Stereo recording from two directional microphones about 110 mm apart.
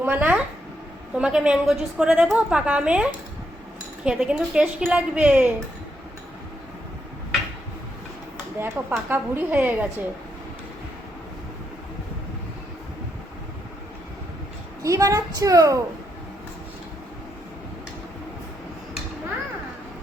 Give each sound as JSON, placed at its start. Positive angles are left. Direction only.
{"t": 0.0, "sound": "a woman's voice", "side_deg": -15}
{"t": 8.6, "sound": "a woman's voice", "side_deg": -20}
{"t": 14.8, "sound": "a woman's voice", "side_deg": -30}